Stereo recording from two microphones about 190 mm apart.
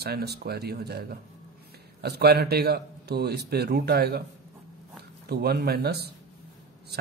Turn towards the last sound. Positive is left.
turn(degrees=-55)  # may be behind; listen again after turning